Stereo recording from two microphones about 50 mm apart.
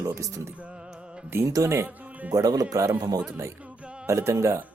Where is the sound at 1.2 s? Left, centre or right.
Right.